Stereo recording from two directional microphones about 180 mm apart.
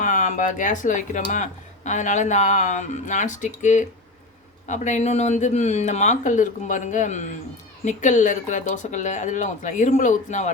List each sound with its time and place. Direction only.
0.0 s speech: 45° left (ahead or behind)